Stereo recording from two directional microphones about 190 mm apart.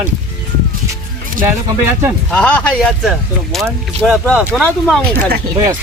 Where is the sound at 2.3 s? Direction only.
5° left (ahead or behind).